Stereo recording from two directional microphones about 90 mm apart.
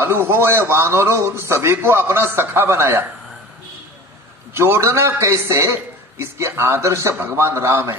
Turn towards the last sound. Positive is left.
turn(degrees=-30)  # may be behind; listen again after turning